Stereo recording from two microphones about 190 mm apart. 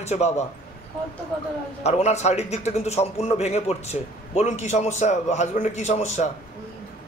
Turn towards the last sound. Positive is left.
turn(degrees=35)  # may be behind; listen again after turning